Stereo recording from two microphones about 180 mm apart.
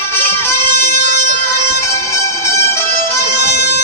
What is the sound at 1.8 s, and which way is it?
Music, 15° left (ahead or behind).